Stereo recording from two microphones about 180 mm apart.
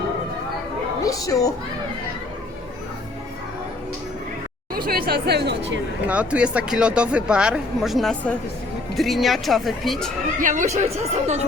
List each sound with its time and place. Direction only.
1.0 s a woman's voice: 20° left (ahead or behind)
4.9 s speech: 60° right (ahead or behind); by 5.8 s 75° right (ahead or behind)
6.1 s speech: 5° right (ahead or behind)
10.4 s speech: 45° right (ahead or behind)